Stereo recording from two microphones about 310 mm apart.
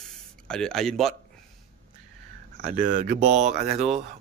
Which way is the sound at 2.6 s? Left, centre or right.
Right.